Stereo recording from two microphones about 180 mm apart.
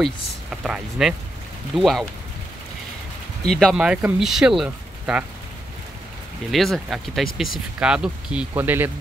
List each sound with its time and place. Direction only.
0.0 s speech: 5° right (ahead or behind)
3.4 s speech: centre (ahead or behind)
6.5 s speech: centre (ahead or behind)